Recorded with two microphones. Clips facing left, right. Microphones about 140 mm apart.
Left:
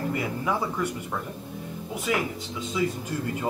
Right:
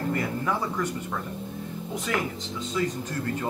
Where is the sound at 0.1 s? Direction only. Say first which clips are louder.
Even; 10° left (ahead or behind).